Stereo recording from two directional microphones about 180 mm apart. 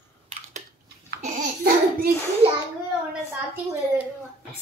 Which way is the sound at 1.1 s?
65° right (ahead or behind).